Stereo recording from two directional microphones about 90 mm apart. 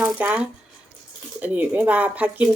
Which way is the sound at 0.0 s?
15° right (ahead or behind).